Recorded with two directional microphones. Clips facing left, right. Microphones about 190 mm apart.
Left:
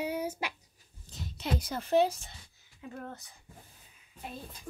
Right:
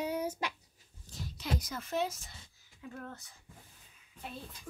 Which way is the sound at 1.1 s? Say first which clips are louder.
Left 3 dB; 20° left (ahead or behind).